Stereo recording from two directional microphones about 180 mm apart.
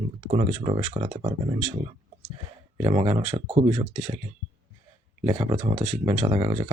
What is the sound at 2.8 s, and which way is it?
Speech, 30° right (ahead or behind).